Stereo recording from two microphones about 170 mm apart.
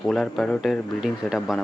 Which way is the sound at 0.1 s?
Centre (ahead or behind).